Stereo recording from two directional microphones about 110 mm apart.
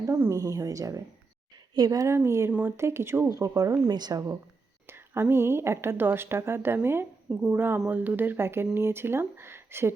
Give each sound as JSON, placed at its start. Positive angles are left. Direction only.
{"t": 0.0, "sound": "a woman's voice", "side_deg": -25}
{"t": 2.5, "sound": "speech", "side_deg": -10}
{"t": 2.7, "sound": "a woman's voice", "side_deg": -25}
{"t": 3.3, "sound": "a woman's voice", "side_deg": -30}
{"t": 4.9, "sound": "a woman's voice", "side_deg": -20}